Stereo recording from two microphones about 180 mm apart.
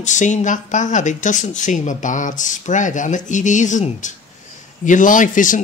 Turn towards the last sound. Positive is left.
turn(degrees=45)  # may be behind; listen again after turning